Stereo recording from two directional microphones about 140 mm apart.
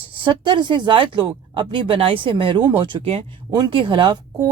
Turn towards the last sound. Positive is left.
turn(degrees=-35)  # may be behind; listen again after turning